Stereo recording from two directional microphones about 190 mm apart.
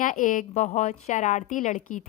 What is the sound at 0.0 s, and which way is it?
A woman's voice, 45° left (ahead or behind).